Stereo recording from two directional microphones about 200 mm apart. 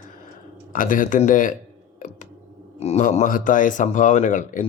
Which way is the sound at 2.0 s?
40° left (ahead or behind).